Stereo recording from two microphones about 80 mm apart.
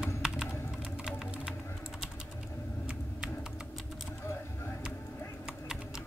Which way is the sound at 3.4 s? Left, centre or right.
Centre.